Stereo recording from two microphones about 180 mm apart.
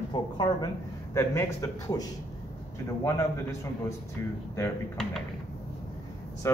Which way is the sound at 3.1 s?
15° left (ahead or behind).